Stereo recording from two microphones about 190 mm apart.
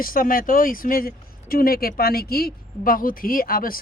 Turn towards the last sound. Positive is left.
turn(degrees=50)  # may be behind; listen again after turning